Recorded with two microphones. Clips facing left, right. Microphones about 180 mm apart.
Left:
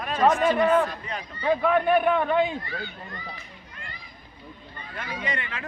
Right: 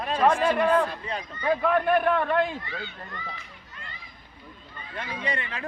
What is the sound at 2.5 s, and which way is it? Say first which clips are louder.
Speech: left 2 dB; 40° left (ahead or behind).